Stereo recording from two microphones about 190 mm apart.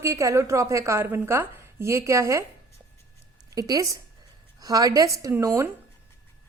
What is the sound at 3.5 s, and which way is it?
A woman's voice, 20° right (ahead or behind).